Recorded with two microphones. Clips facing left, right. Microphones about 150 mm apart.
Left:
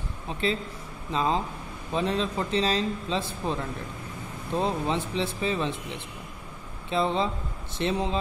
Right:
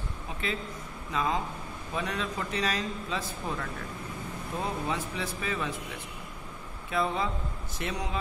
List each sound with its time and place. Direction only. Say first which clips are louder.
0.4 s a man's voice: left 6 dB; 30° left (ahead or behind)